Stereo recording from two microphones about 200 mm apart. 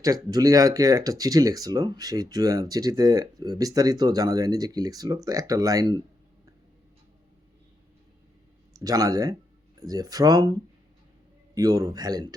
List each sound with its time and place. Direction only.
0.0 s speech: 15° right (ahead or behind)
8.7 s speech: 20° right (ahead or behind)